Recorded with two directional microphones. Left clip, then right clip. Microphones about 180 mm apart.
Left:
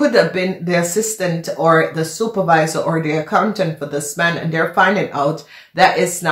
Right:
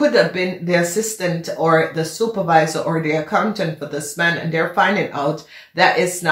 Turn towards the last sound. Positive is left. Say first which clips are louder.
# left 2 dB
turn(degrees=40)  # may be behind; listen again after turning